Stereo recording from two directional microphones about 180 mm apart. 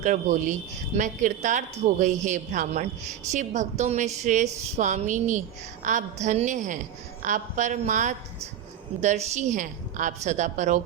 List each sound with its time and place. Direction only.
0.0 s a woman's voice: 45° right (ahead or behind)